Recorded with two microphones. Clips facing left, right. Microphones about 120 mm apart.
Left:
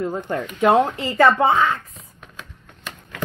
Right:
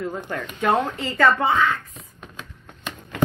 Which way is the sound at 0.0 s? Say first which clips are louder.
Left 4 dB; 25° left (ahead or behind).